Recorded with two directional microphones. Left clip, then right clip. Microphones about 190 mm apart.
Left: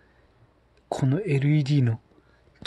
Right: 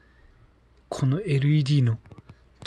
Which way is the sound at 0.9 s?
5° left (ahead or behind).